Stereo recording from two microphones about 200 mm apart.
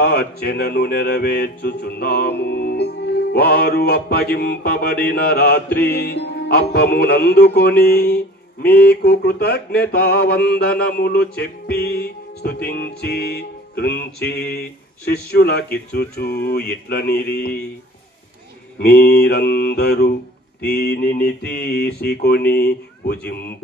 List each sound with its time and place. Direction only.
0.0 s mantra: 50° left (ahead or behind)
18.8 s mantra: 50° left (ahead or behind)